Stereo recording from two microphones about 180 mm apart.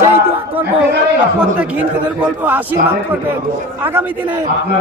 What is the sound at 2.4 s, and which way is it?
Speech, 10° right (ahead or behind).